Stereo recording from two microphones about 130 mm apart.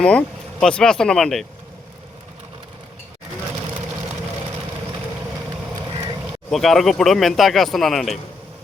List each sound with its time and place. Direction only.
0.0 s speech: 10° left (ahead or behind)
6.5 s speech: centre (ahead or behind)